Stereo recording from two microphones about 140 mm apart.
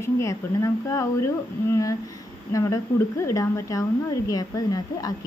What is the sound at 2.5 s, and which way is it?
A woman's voice, 25° left (ahead or behind).